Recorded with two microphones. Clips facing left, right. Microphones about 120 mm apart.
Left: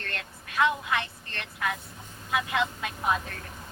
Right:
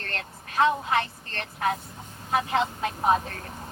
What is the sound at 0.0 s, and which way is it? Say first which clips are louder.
A woman's voice: right 2 dB; 35° right (ahead or behind).